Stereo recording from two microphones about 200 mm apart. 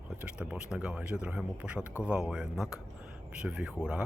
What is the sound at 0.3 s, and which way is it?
Speech, 5° right (ahead or behind).